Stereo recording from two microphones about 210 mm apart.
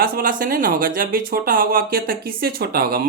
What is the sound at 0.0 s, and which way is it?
Speech, 45° right (ahead or behind).